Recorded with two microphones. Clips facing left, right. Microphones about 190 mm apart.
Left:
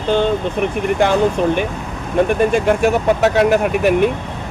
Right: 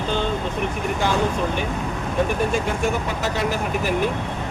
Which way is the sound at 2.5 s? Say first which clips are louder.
Left 8 dB; 65° left (ahead or behind).